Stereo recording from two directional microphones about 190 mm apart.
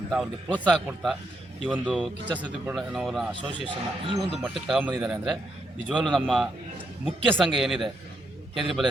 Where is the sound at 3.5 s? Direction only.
25° right (ahead or behind).